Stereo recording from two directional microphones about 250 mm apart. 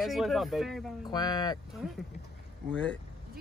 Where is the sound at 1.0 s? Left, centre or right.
Centre.